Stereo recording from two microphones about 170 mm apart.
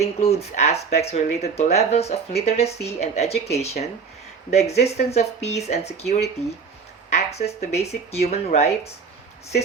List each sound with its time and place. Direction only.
0.0 s speech: 35° left (ahead or behind)